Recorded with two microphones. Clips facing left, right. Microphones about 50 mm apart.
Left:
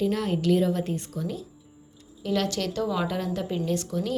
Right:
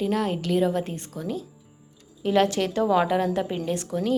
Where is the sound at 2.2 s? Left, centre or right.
Right.